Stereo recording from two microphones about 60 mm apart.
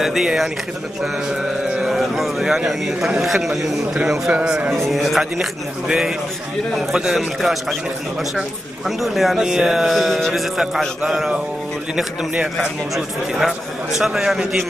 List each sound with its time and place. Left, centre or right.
0.0 s a man's voice: centre
1.8 s speech: centre
4.3 s a man's voice: right
4.8 s speech: centre
8.8 s speech: centre
12.9 s a man's voice: centre